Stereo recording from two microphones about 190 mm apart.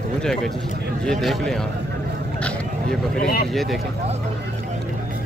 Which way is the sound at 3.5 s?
Centre (ahead or behind).